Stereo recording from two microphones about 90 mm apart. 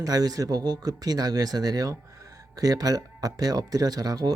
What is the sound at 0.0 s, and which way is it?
Speech, 45° right (ahead or behind).